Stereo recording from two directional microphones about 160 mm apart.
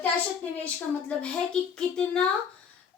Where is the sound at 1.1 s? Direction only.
5° left (ahead or behind).